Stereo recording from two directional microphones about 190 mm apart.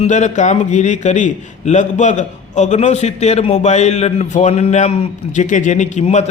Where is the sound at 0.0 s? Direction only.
40° left (ahead or behind).